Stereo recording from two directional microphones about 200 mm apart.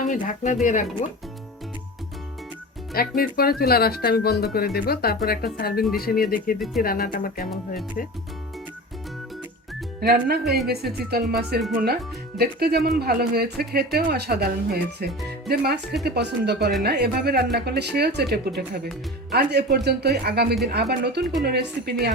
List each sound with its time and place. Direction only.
0.1 s speech: 40° left (ahead or behind)
2.9 s speech: 50° left (ahead or behind)
10.0 s speech: 50° right (ahead or behind)